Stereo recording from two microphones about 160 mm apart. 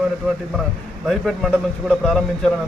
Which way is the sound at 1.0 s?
Centre (ahead or behind).